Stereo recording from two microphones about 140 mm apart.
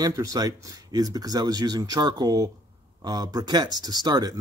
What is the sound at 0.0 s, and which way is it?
Speech, 25° right (ahead or behind).